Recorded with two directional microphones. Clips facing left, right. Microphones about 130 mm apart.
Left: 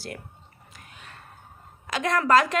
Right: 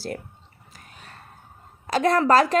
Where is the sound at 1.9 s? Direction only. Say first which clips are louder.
Right 3 dB; 35° right (ahead or behind).